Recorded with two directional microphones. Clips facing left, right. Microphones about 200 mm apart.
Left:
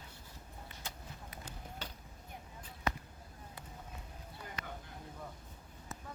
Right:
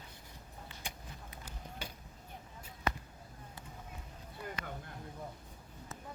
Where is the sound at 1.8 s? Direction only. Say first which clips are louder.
Right 2 dB; 10° right (ahead or behind).